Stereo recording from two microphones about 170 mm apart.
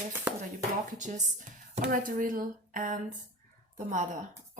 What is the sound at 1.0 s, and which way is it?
Speech, 45° right (ahead or behind).